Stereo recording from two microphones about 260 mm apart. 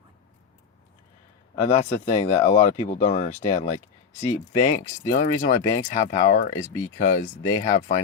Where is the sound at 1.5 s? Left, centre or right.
Left.